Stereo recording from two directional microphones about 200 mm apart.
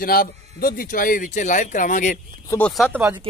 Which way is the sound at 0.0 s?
50° left (ahead or behind).